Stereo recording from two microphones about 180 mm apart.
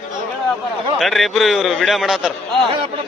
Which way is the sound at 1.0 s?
Centre (ahead or behind).